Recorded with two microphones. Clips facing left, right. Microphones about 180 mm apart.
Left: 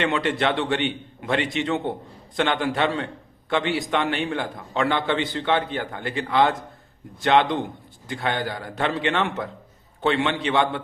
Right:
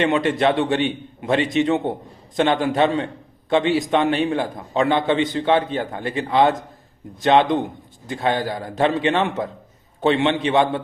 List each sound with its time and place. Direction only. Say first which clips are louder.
0.0 s a man's voice: right 5 dB; 20° right (ahead or behind)